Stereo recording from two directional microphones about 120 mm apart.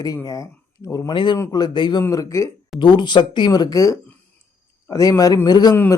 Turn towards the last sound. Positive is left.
turn(degrees=35)  # may be behind; listen again after turning